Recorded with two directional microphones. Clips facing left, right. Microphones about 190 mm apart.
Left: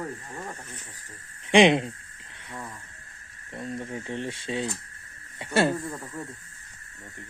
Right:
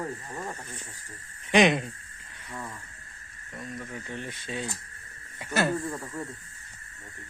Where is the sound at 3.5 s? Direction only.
30° left (ahead or behind).